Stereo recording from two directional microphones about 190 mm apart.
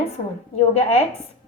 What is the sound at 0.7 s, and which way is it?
Speech, 35° left (ahead or behind).